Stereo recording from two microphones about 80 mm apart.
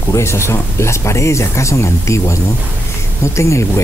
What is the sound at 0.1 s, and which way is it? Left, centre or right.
Speech, left.